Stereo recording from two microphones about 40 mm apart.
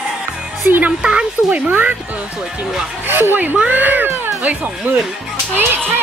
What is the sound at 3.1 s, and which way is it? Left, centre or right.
Speech, right.